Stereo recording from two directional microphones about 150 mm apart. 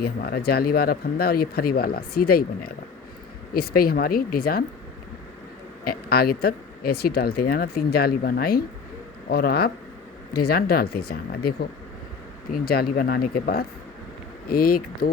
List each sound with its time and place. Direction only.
0.0 s speech: 90° left
5.8 s speech: 85° left